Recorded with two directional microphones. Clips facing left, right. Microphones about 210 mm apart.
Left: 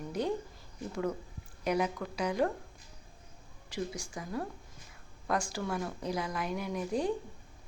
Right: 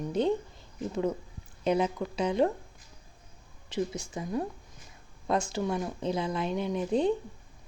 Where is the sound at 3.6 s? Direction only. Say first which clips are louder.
Right 5 dB; 25° right (ahead or behind).